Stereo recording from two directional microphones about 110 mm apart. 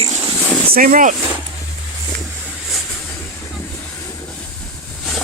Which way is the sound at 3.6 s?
20° left (ahead or behind).